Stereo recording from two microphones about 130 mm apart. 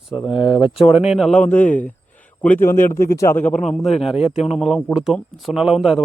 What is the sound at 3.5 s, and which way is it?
Speech, 5° left (ahead or behind).